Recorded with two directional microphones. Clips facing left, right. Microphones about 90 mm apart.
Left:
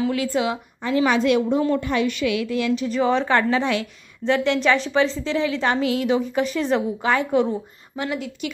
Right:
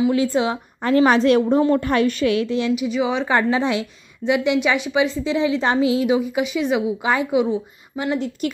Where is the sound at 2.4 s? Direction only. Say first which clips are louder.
Right 2 dB; 25° right (ahead or behind).